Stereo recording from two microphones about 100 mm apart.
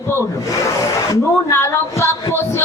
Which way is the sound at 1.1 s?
25° left (ahead or behind).